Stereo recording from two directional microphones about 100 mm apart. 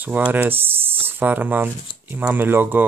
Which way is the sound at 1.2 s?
15° right (ahead or behind).